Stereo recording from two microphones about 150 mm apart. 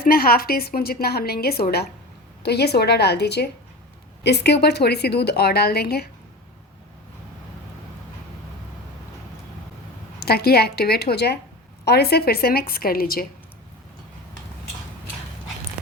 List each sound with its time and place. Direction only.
0.0 s a woman's voice: 80° left
10.2 s a woman's voice: 90° left